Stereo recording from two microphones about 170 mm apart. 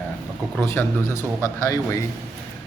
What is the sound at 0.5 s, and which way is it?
A man's voice, 15° left (ahead or behind).